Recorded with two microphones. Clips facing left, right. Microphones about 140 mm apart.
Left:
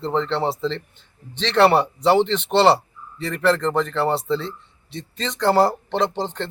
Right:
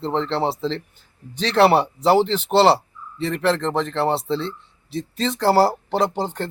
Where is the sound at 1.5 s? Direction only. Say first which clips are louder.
Even; centre (ahead or behind).